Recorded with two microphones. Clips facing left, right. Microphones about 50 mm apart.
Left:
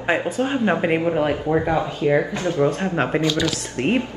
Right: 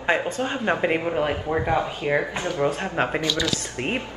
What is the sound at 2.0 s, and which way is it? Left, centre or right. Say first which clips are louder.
Speech: left 4 dB; centre.